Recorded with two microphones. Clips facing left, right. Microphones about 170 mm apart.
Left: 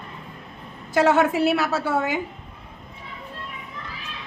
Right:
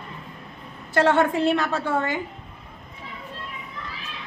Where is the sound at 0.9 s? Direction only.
10° left (ahead or behind).